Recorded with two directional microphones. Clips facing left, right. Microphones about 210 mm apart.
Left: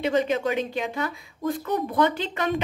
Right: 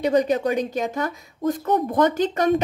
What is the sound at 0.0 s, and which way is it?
Speech, 40° right (ahead or behind).